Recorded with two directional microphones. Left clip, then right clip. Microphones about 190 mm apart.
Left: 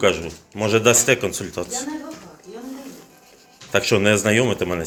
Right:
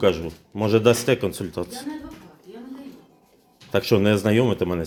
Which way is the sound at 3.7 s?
50° right (ahead or behind).